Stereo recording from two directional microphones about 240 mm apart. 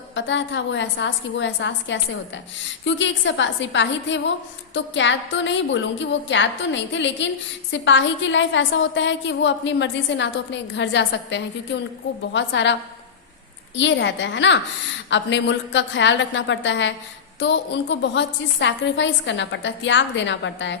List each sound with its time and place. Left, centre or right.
0.1 s a woman's voice: left
13.7 s a woman's voice: left